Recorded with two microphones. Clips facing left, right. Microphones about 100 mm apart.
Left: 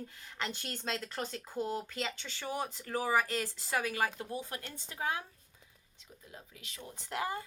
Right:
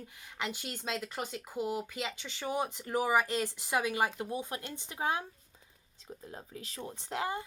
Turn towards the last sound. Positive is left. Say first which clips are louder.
# right 1 dB
turn(degrees=-25)  # may be behind; listen again after turning